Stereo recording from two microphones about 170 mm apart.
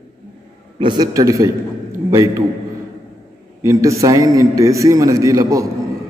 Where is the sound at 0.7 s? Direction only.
25° right (ahead or behind).